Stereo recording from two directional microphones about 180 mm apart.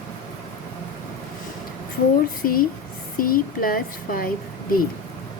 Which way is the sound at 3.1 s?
50° left (ahead or behind).